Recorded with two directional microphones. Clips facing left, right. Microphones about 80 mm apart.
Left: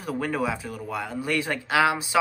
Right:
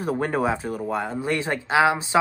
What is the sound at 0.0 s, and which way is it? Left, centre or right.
Speech, right.